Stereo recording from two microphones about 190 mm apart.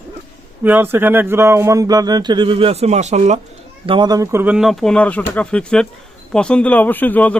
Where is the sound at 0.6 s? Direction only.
10° right (ahead or behind); by 3.3 s 35° right (ahead or behind).